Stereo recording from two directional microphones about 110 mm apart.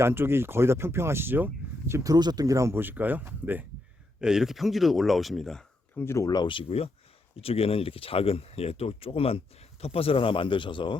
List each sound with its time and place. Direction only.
0.0 s speech: 20° right (ahead or behind)
1.9 s speech: 35° right (ahead or behind); by 3.7 s 15° right (ahead or behind)
4.2 s speech: 5° right (ahead or behind)
6.0 s speech: 25° left (ahead or behind)
6.3 s speech: 50° left (ahead or behind)